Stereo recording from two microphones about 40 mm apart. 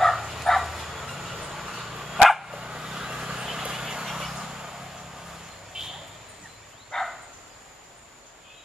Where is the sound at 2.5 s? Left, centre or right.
Right.